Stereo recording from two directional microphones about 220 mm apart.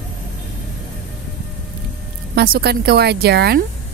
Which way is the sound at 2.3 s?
45° right (ahead or behind).